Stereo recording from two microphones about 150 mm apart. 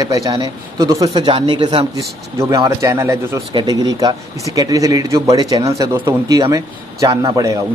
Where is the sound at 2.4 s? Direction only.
20° right (ahead or behind).